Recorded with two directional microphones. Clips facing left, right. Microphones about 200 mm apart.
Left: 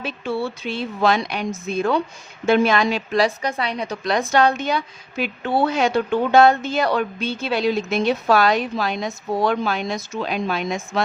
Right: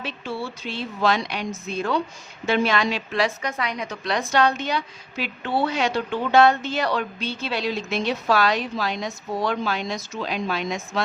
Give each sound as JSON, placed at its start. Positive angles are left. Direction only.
{"t": 0.0, "sound": "a woman's voice", "side_deg": 55}